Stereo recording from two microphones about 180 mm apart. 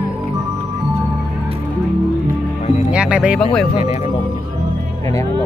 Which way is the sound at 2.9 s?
5° right (ahead or behind).